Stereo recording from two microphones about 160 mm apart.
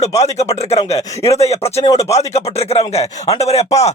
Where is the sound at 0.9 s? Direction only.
20° left (ahead or behind).